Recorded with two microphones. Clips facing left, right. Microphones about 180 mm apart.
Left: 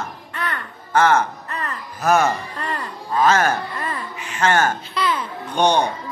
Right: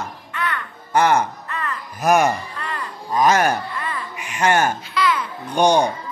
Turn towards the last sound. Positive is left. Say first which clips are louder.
# right 2 dB
turn(degrees=-10)  # may be behind; listen again after turning